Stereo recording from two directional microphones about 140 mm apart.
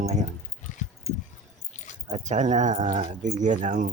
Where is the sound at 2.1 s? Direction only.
60° right (ahead or behind).